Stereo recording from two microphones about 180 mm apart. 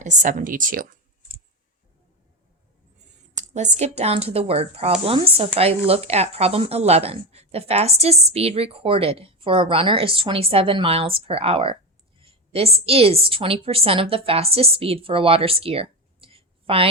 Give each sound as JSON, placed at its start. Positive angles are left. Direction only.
{"t": 0.0, "sound": "speech", "side_deg": -45}
{"t": 3.5, "sound": "a woman's voice", "side_deg": -40}